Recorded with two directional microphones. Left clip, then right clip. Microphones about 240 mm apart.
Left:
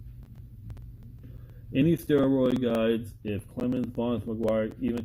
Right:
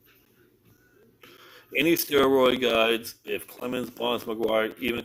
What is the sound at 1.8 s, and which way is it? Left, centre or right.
Speech, centre.